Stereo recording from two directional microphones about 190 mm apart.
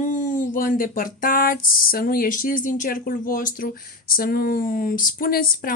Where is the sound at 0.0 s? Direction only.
40° left (ahead or behind).